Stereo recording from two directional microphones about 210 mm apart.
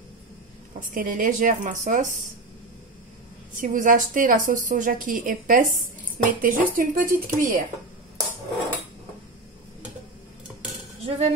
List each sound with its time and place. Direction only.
0.7 s a woman's voice: 40° right (ahead or behind)
3.5 s a woman's voice: 40° right (ahead or behind)
11.1 s speech: 30° right (ahead or behind)